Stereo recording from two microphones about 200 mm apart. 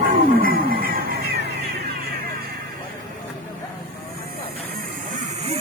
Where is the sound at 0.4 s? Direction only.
45° right (ahead or behind).